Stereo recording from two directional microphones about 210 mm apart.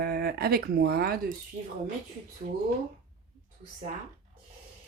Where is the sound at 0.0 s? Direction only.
50° right (ahead or behind).